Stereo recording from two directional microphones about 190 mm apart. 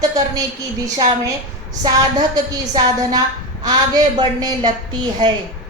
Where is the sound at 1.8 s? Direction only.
20° right (ahead or behind).